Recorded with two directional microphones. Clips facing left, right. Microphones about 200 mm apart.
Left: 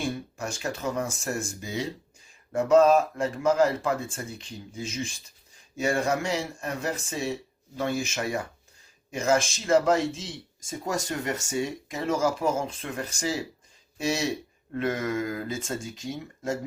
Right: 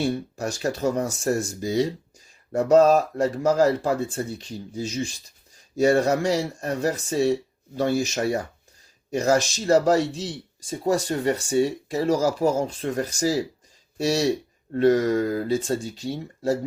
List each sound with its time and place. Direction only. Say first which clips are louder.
0.0 s speech: right 6 dB; 35° right (ahead or behind)